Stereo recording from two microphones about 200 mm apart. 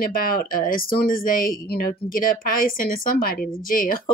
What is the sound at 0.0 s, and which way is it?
A woman's voice, 45° left (ahead or behind).